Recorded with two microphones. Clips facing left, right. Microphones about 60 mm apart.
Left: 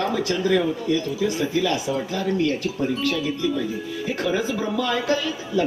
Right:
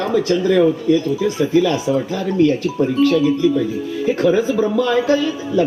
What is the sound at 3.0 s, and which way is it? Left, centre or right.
Speech, right.